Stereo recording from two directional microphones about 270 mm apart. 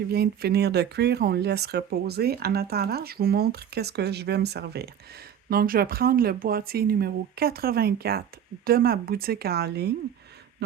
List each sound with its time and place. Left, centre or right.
0.1 s speech: right